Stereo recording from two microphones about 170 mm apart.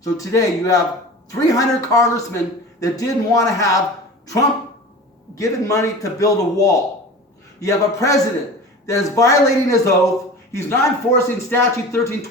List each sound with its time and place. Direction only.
0.0 s a man's voice: 20° left (ahead or behind)
5.3 s a man's voice: 20° left (ahead or behind)